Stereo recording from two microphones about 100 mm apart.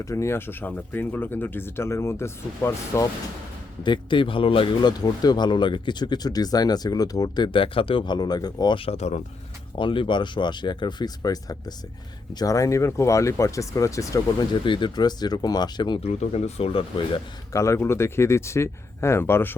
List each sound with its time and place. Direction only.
0.0 s speech: 30° left (ahead or behind)
3.8 s speech: 50° left (ahead or behind)
8.8 s speech: 85° left
9.7 s speech: 55° left (ahead or behind); by 14.2 s 30° left (ahead or behind)
14.6 s speech: 55° left (ahead or behind)
16.0 s speech: 90° left
17.5 s speech: 30° left (ahead or behind)